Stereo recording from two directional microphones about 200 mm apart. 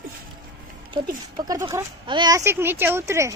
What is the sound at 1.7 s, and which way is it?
Speech, 20° right (ahead or behind).